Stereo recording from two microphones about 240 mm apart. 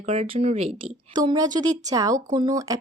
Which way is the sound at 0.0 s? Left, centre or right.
Right.